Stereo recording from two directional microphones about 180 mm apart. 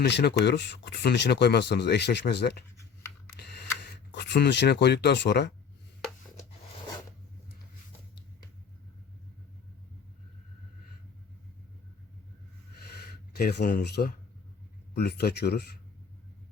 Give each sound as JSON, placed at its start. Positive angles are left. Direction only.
{"t": 0.0, "sound": "speech", "side_deg": 70}
{"t": 3.3, "sound": "camera", "side_deg": 65}
{"t": 4.1, "sound": "speech", "side_deg": 70}
{"t": 13.3, "sound": "speech", "side_deg": 65}